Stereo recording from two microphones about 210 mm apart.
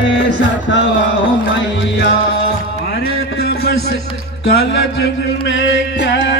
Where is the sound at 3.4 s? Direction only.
50° left (ahead or behind).